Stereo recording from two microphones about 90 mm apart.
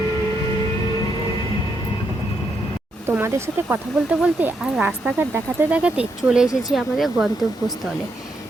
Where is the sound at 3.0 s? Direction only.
30° right (ahead or behind).